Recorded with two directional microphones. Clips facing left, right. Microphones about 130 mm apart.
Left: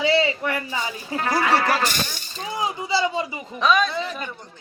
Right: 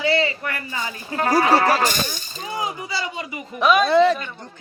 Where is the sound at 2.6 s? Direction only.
25° left (ahead or behind).